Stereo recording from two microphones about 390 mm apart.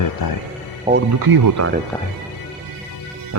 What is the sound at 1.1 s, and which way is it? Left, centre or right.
Speech, right.